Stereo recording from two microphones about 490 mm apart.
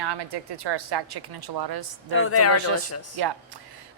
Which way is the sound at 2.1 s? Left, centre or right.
Left.